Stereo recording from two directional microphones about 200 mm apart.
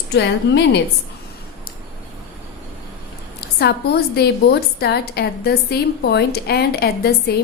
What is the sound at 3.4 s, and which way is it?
A woman's voice, 55° left (ahead or behind).